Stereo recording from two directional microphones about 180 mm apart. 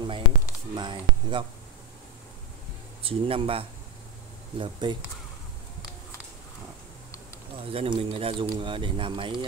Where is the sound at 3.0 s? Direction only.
30° right (ahead or behind).